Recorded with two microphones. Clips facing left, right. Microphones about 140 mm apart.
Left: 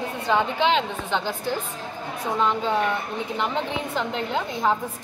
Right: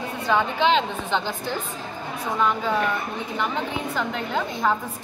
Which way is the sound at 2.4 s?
20° left (ahead or behind).